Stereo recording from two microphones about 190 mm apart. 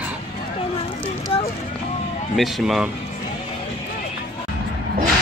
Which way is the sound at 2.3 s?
Centre (ahead or behind).